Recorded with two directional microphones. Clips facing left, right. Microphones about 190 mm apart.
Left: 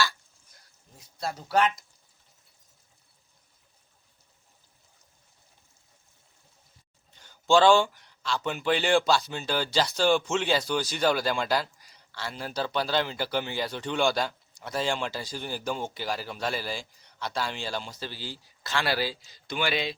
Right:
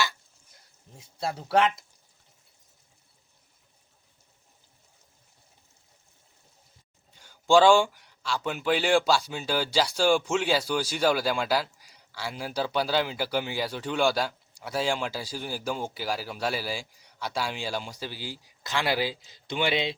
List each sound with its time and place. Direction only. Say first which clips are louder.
0.9 s speech: right 2 dB; 25° right (ahead or behind)
7.1 s speech: right 2 dB; 10° right (ahead or behind)